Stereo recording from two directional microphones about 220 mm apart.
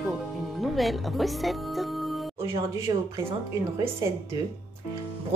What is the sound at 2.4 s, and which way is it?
Speech, 15° right (ahead or behind).